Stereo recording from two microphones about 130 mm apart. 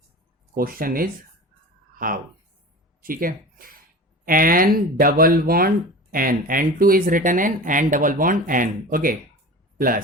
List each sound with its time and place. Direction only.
0.6 s speech: 90° right